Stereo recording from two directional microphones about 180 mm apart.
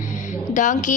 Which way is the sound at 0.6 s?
45° left (ahead or behind).